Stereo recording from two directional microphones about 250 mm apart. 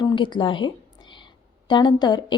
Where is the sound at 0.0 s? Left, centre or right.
Centre.